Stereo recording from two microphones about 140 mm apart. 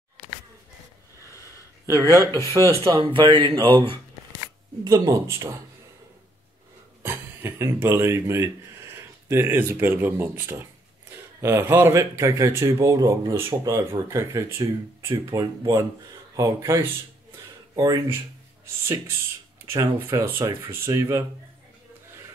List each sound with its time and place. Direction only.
1.9 s speech: 25° right (ahead or behind)
3.0 s speech: 35° right (ahead or behind)
4.8 s speech: 25° right (ahead or behind)
7.0 s speech: 15° right (ahead or behind)
19.6 s speech: 20° right (ahead or behind)